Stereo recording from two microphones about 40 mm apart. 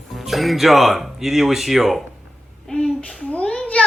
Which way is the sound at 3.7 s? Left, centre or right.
Left.